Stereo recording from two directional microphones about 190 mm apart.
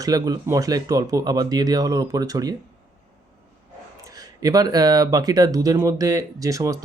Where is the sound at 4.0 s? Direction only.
20° right (ahead or behind).